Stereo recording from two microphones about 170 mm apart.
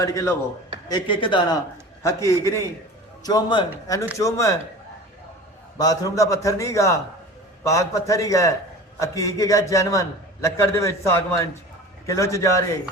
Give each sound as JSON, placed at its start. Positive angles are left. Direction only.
{"t": 0.0, "sound": "a man's voice", "side_deg": 20}
{"t": 2.0, "sound": "a man's voice", "side_deg": 15}
{"t": 5.7, "sound": "a man's voice", "side_deg": 20}